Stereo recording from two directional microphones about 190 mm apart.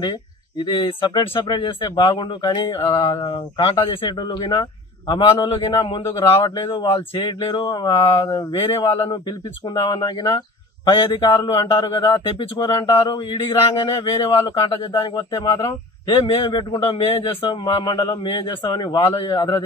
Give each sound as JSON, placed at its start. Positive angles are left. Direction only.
{"t": 0.6, "sound": "a man's voice", "side_deg": 25}